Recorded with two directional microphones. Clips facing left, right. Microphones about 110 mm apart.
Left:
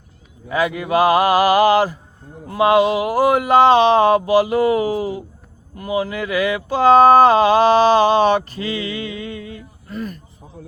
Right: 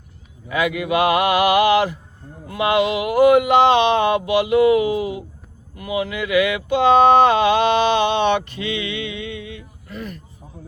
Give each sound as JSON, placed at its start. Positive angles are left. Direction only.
{"t": 0.4, "sound": "speech", "side_deg": 35}